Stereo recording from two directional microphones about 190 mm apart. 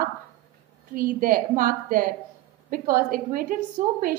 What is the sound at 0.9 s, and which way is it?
A woman's voice, 50° right (ahead or behind).